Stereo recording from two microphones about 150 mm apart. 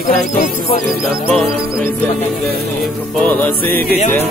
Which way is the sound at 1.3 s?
Centre (ahead or behind).